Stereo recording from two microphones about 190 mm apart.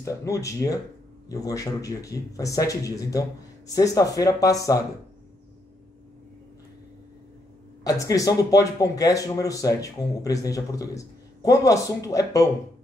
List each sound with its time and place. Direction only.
0.0 s speech: 15° left (ahead or behind)
7.8 s speech: 15° left (ahead or behind)